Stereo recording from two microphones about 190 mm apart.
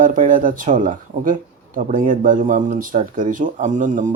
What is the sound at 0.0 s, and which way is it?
Speech, 45° right (ahead or behind).